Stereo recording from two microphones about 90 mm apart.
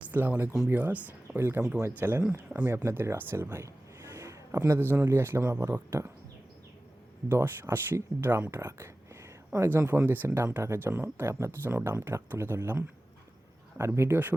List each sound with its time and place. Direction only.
0.1 s a man's voice: 20° right (ahead or behind)
7.3 s speech: 25° right (ahead or behind)